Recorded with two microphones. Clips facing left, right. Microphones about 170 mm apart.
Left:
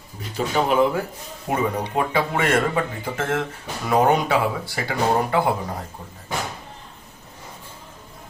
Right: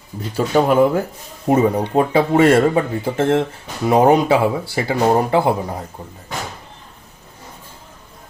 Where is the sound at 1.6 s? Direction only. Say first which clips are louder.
Right 6 dB; 30° right (ahead or behind).